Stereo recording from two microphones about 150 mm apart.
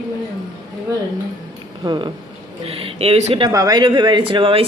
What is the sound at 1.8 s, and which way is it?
Speech, 30° right (ahead or behind).